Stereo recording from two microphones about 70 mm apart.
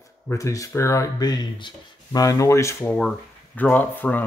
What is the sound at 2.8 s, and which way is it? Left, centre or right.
Speech, centre.